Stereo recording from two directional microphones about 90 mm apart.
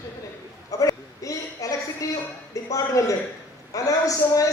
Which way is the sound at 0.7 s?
40° left (ahead or behind).